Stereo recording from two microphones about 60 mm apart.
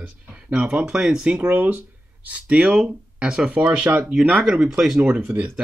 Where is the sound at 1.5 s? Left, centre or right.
Right.